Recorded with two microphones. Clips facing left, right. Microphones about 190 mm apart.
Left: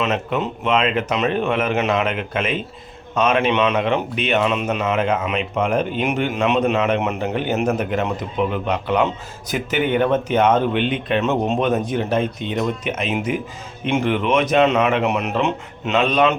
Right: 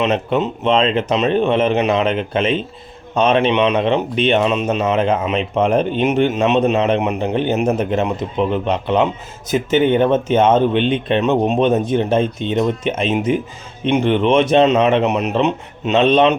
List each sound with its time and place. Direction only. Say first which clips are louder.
0.0 s a man's voice: right 4 dB; 25° right (ahead or behind)